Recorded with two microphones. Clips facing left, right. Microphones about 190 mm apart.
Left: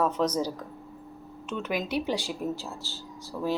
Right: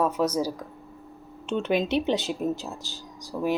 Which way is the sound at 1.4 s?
25° right (ahead or behind).